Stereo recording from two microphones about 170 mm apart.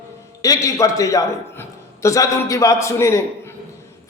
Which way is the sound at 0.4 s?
20° left (ahead or behind).